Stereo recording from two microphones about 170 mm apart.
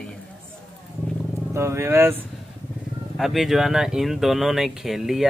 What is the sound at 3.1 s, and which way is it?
A man's voice, centre (ahead or behind).